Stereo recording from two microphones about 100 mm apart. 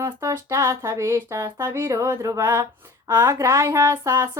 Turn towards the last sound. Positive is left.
turn(degrees=-30)  # may be behind; listen again after turning